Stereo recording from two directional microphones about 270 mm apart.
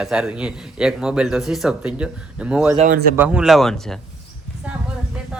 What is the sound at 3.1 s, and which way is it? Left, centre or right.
Speech, centre.